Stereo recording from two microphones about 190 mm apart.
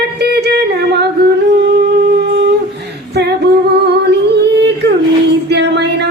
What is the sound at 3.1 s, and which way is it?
Singing, 60° right (ahead or behind).